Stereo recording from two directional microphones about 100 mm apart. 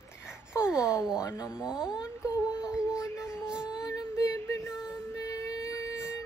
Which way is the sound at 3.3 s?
10° right (ahead or behind).